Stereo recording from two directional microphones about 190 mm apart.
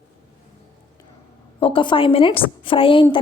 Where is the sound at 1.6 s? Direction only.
30° left (ahead or behind).